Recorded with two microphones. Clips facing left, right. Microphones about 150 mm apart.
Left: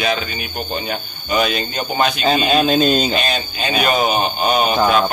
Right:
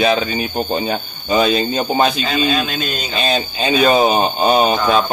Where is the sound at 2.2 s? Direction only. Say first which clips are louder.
Left 3 dB; 25° left (ahead or behind).